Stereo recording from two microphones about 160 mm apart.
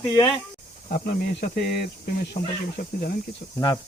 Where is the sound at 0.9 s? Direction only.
65° left (ahead or behind).